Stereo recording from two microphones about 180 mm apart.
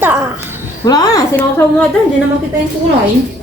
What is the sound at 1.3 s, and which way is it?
Speech, 5° left (ahead or behind).